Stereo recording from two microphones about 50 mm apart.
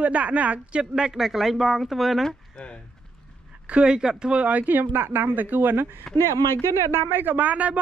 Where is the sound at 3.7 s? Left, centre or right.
Right.